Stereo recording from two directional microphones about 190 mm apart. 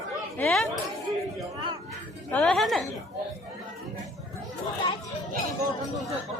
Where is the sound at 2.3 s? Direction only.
5° left (ahead or behind).